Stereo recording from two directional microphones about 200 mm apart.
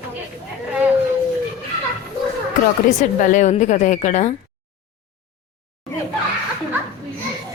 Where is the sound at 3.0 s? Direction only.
40° left (ahead or behind).